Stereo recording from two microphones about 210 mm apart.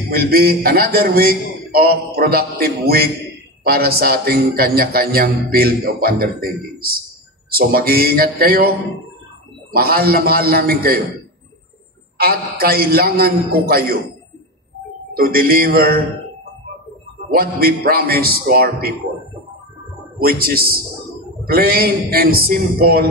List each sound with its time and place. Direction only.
0.1 s speech: 45° right (ahead or behind)
12.2 s speech: 45° right (ahead or behind)
15.3 s speech: 45° right (ahead or behind)
17.3 s speech: 45° right (ahead or behind)
20.2 s speech: 45° right (ahead or behind)